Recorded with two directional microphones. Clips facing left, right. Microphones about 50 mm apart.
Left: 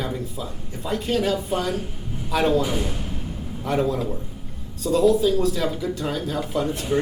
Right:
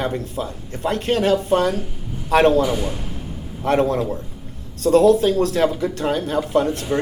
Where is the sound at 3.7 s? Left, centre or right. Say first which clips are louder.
Right 5 dB; right.